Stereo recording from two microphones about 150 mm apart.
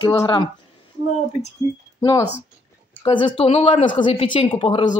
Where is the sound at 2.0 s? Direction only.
25° left (ahead or behind).